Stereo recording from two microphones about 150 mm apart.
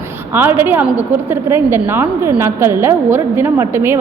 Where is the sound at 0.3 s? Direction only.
15° right (ahead or behind).